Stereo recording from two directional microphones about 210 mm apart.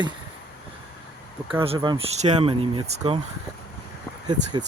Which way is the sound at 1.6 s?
25° right (ahead or behind).